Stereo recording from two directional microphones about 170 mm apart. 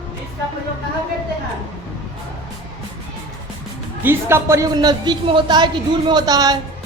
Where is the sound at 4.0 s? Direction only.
15° right (ahead or behind).